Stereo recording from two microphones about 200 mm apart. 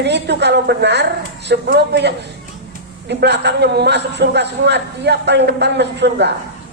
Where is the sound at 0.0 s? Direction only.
60° right (ahead or behind).